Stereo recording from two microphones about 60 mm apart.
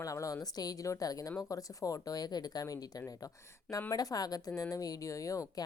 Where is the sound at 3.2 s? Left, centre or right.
Left.